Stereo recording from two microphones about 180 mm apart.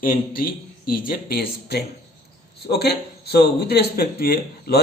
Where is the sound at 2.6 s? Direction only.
60° left (ahead or behind).